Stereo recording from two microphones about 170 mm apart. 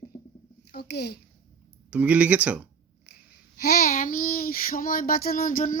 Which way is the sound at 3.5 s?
60° left (ahead or behind).